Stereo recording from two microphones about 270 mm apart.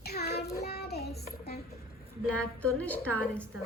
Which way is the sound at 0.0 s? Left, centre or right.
Left.